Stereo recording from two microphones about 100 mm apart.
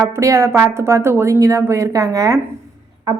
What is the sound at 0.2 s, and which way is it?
Speech, 30° right (ahead or behind).